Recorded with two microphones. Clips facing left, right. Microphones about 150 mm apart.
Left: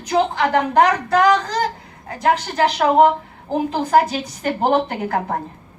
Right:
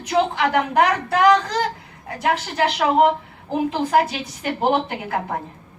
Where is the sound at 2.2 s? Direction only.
35° left (ahead or behind).